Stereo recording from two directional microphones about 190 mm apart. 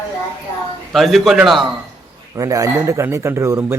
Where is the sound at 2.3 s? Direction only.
15° right (ahead or behind).